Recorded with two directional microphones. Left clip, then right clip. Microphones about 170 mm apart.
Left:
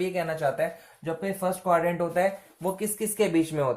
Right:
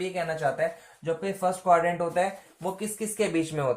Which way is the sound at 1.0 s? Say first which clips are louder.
Right 1 dB; 30° left (ahead or behind).